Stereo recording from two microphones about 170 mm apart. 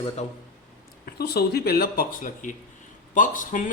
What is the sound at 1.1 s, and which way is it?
Speech, 70° left (ahead or behind).